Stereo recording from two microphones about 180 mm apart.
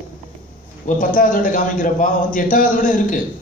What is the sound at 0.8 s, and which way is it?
A man's voice, 45° left (ahead or behind).